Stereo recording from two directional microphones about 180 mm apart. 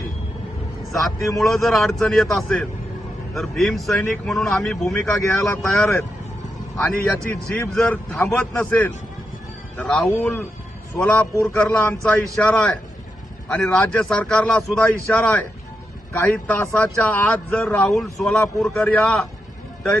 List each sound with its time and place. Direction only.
0.9 s a man's voice: centre (ahead or behind)
7.3 s a man's voice: 10° left (ahead or behind)